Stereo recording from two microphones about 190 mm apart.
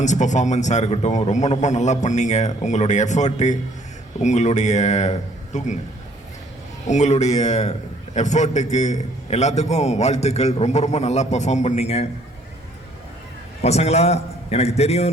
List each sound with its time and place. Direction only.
0.0 s a man's voice: 40° left (ahead or behind)
6.8 s a man's voice: 40° left (ahead or behind)
13.6 s a man's voice: 35° left (ahead or behind)